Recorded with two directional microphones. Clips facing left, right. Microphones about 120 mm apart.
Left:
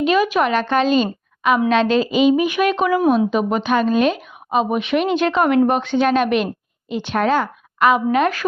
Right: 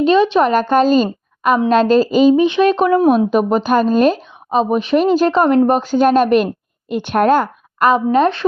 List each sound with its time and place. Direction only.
0.0 s a woman's voice: 30° right (ahead or behind)
2.3 s a woman's voice: 25° right (ahead or behind)
3.1 s a woman's voice: 45° right (ahead or behind)
6.9 s a woman's voice: 50° right (ahead or behind); by 8.2 s 35° right (ahead or behind)